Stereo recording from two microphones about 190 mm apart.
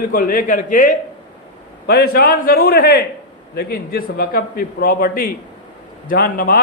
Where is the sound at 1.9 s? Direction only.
55° left (ahead or behind).